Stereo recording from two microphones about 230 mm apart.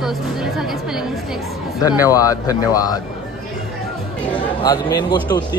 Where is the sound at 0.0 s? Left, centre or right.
Centre.